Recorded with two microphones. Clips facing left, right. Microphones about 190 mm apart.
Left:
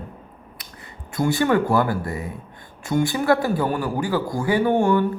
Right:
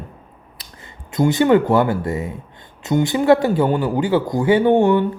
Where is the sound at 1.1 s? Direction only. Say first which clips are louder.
Right 5 dB; 20° right (ahead or behind).